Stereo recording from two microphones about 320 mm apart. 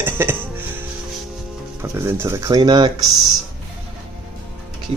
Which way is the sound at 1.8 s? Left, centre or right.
Centre.